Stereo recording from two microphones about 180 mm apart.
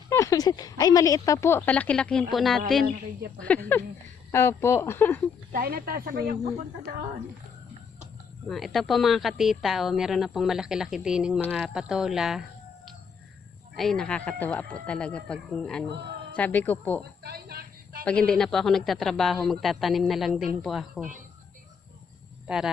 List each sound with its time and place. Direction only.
0.1 s speech: 20° left (ahead or behind)
5.5 s speech: 50° right (ahead or behind)
8.4 s a woman's voice: centre (ahead or behind)
17.2 s a sound: 60° right (ahead or behind)
18.0 s a woman's voice: 5° left (ahead or behind)
22.4 s speech: 5° right (ahead or behind)